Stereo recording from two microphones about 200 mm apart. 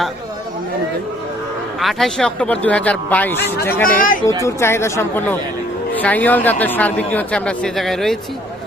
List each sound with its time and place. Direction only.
1.8 s speech: centre (ahead or behind)
3.8 s speech: 45° left (ahead or behind)
4.4 s a man's voice: 10° left (ahead or behind)